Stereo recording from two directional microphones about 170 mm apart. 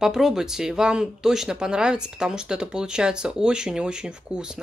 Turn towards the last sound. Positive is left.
turn(degrees=-5)  # may be behind; listen again after turning